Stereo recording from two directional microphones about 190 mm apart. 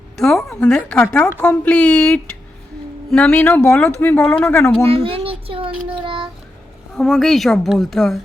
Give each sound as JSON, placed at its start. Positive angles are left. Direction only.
{"t": 0.2, "sound": "a woman's voice", "side_deg": 0}
{"t": 4.9, "sound": "a sound", "side_deg": -30}
{"t": 6.1, "sound": "child singing", "side_deg": -25}
{"t": 6.9, "sound": "a woman's voice", "side_deg": 0}